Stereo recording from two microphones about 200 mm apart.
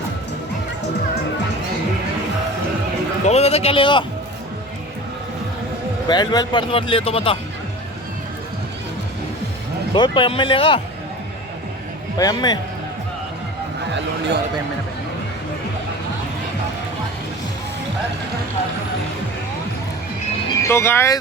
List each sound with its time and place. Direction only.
3.2 s speech: 30° left (ahead or behind)
6.1 s speech: 20° left (ahead or behind)
9.9 s speech: 25° left (ahead or behind)
12.1 s speech: 20° left (ahead or behind)
13.9 s speech: 60° right (ahead or behind)
20.7 s speech: 10° left (ahead or behind)